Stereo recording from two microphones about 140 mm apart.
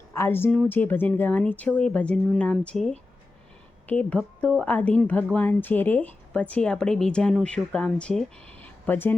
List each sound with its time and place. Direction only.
0.1 s a woman's voice: 15° left (ahead or behind)